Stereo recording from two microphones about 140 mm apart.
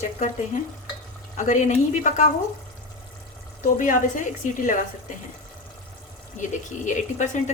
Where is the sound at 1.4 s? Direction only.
60° left (ahead or behind).